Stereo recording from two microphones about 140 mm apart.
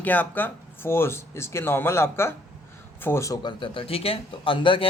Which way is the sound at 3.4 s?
35° left (ahead or behind).